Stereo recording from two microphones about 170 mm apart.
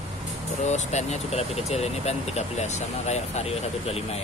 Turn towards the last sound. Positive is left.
turn(degrees=35)  # may be behind; listen again after turning